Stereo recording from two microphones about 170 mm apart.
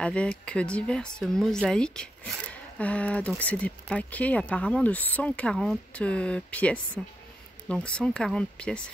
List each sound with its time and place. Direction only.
0.0 s speech: 5° left (ahead or behind)